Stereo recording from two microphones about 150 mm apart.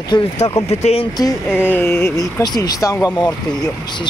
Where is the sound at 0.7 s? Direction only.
45° left (ahead or behind).